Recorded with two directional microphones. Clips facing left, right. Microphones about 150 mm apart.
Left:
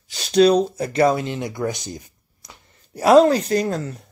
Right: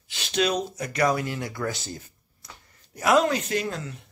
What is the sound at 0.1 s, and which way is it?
Speech, 35° left (ahead or behind).